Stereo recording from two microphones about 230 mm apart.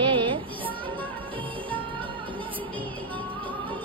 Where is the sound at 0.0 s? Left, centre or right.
Right.